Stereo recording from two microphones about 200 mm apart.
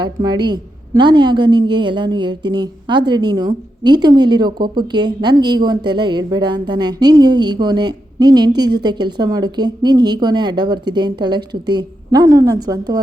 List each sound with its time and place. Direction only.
0.0 s a woman's voice: 20° right (ahead or behind)